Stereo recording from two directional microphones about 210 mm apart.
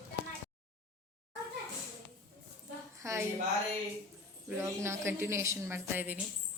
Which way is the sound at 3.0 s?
15° right (ahead or behind).